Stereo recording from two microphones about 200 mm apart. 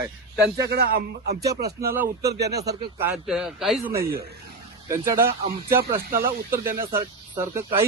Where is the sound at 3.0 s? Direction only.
5° right (ahead or behind).